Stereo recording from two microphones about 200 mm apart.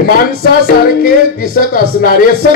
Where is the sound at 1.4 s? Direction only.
45° left (ahead or behind).